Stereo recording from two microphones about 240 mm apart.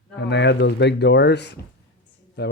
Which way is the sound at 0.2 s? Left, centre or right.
Left.